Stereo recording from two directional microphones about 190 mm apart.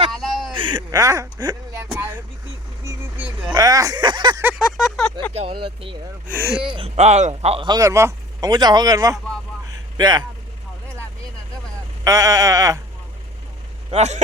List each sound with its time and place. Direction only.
0.1 s a sound: centre (ahead or behind)
0.5 s a sound: 25° right (ahead or behind)
2.0 s vehicle: 10° right (ahead or behind)
3.5 s speech: 20° right (ahead or behind)
4.4 s a sound: 5° right (ahead or behind)
5.3 s speech: 30° right (ahead or behind)
6.2 s speech: 10° right (ahead or behind)
6.7 s speech: 35° right (ahead or behind)
12.0 s sheep: 15° right (ahead or behind)
13.9 s speech: 35° right (ahead or behind)